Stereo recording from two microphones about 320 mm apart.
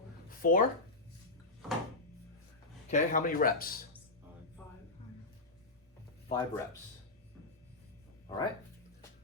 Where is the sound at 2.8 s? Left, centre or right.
Left.